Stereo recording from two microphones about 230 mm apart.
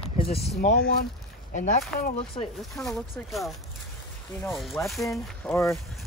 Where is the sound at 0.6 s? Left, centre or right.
Left.